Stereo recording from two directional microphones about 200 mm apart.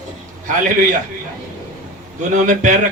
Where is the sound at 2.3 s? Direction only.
40° right (ahead or behind).